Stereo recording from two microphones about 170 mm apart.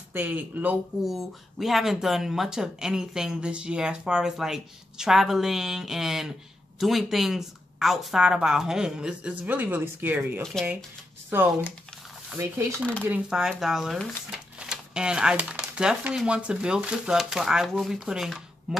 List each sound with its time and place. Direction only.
0.1 s speech: 10° right (ahead or behind)
10.4 s speech: centre (ahead or behind)
11.2 s speech: 15° right (ahead or behind)
12.7 s speech: 5° left (ahead or behind)
13.0 s speech: 5° right (ahead or behind)